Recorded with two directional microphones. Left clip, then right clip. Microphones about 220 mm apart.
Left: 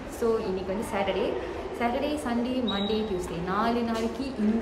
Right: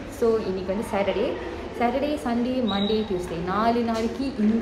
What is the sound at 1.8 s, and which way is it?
A woman's voice, 5° left (ahead or behind).